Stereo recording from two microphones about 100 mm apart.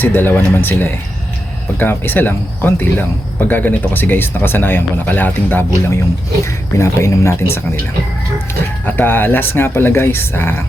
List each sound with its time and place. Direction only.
0.0 s speech: 20° left (ahead or behind)
8.9 s speech: 20° left (ahead or behind)